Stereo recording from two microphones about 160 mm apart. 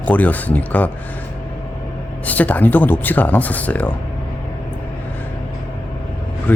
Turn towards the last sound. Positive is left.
turn(degrees=10)  # may be behind; listen again after turning